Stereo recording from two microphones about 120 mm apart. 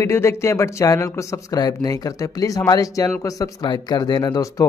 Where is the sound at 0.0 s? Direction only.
20° left (ahead or behind).